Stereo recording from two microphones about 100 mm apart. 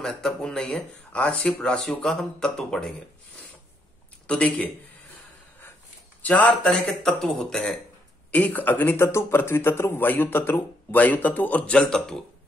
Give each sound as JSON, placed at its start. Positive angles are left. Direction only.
{"t": 0.0, "sound": "speech", "side_deg": 5}
{"t": 4.3, "sound": "speech", "side_deg": 10}
{"t": 6.2, "sound": "a man's voice", "side_deg": 15}